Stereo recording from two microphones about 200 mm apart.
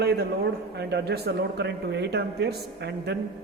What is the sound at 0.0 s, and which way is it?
A man's voice, 55° right (ahead or behind).